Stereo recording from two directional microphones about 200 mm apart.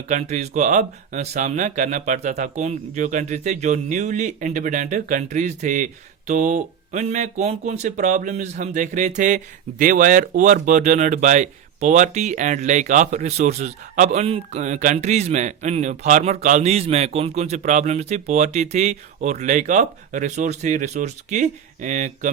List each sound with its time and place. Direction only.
0.1 s speech: 35° right (ahead or behind)